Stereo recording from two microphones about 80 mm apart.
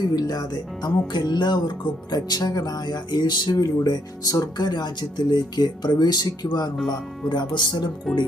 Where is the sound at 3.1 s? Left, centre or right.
Left.